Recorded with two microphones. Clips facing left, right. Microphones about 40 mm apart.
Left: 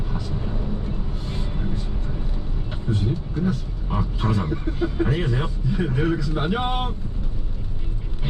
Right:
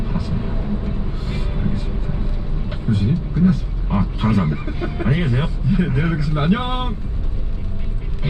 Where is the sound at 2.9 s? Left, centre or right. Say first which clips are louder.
Right 5 dB; centre.